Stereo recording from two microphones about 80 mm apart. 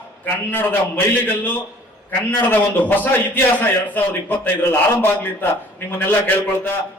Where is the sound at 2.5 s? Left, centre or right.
Left.